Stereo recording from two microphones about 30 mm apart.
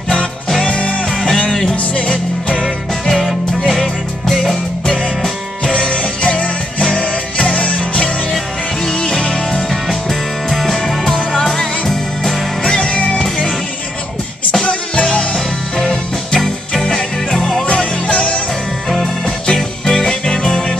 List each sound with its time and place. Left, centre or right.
0.7 s music: left
2.6 s music: centre
5.7 s music: left
7.4 s music: left
9.1 s music: centre
9.7 s music: centre
12.6 s music: left
12.9 s music: left
14.7 s music: left
15.3 s music: centre
18.1 s music: left
19.4 s music: centre